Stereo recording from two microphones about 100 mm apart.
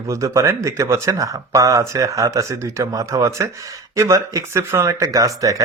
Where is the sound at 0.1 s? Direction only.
30° right (ahead or behind).